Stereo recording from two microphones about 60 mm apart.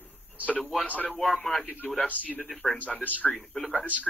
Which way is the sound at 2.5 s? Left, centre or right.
Centre.